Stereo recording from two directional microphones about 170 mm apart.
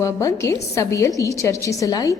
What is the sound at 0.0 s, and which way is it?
A woman's voice, 20° left (ahead or behind).